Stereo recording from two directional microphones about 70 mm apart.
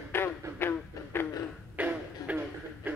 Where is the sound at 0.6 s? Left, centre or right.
Left.